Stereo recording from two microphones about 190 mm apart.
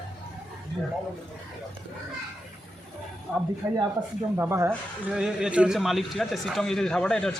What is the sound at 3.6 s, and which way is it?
A man's voice, 10° right (ahead or behind).